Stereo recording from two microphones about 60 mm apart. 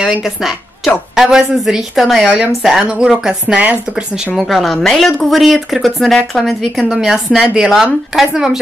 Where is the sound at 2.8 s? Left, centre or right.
Centre.